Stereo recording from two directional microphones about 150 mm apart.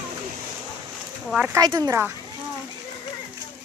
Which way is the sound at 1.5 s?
25° right (ahead or behind).